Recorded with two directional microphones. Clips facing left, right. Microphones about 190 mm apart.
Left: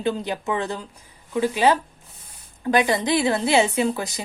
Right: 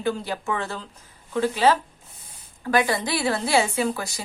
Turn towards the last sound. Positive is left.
turn(degrees=20)  # may be behind; listen again after turning